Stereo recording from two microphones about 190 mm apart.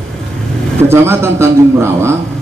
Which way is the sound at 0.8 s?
15° right (ahead or behind).